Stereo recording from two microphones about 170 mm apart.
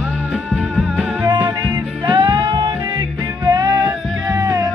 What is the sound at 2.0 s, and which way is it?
Music, 25° right (ahead or behind).